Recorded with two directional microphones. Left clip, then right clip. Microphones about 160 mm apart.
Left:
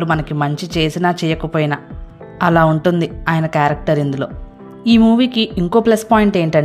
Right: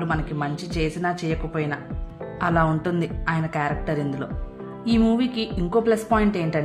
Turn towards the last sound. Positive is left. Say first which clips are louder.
# left 9 dB
turn(degrees=45)  # may be behind; listen again after turning